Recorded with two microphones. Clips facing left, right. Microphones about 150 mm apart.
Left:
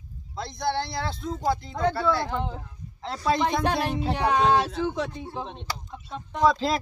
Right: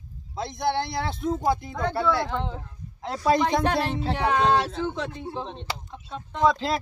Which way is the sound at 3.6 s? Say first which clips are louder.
Right 1 dB; 15° left (ahead or behind).